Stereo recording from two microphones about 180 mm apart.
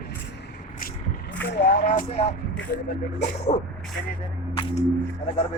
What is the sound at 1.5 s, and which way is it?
Speech, 65° left (ahead or behind).